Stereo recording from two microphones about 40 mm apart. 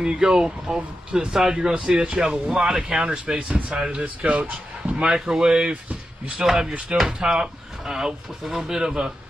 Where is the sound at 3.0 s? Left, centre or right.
Right.